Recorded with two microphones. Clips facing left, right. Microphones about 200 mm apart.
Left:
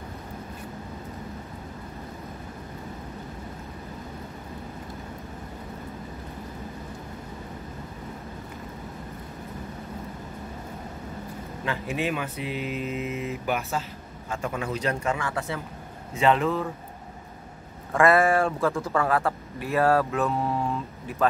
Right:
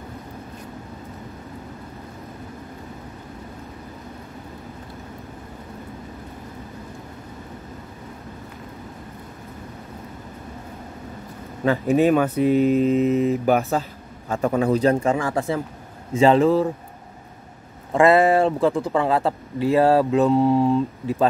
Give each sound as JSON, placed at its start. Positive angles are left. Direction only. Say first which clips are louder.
{"t": 11.6, "sound": "speech", "louder": "right 11 dB", "side_deg": -40}
{"t": 17.9, "sound": "speech", "louder": "right 5 dB", "side_deg": -20}